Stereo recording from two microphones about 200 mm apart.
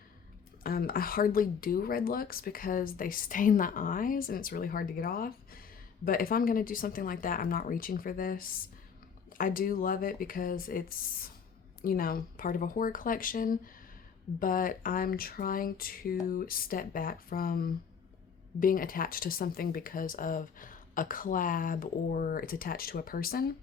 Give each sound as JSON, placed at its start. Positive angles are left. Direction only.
{"t": 0.6, "sound": "speech", "side_deg": 45}